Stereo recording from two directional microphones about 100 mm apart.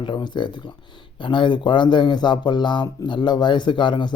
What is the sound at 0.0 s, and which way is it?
Speech, 50° left (ahead or behind).